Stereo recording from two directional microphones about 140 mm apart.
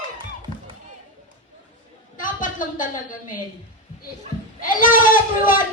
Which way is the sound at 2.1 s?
75° left (ahead or behind).